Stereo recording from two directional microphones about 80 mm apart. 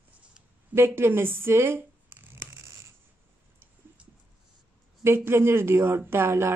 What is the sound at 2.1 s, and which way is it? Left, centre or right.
Scissors, right.